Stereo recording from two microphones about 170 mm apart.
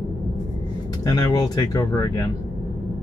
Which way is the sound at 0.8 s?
25° left (ahead or behind).